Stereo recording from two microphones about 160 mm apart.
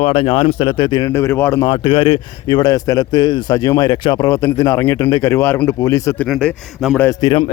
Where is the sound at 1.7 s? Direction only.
35° left (ahead or behind).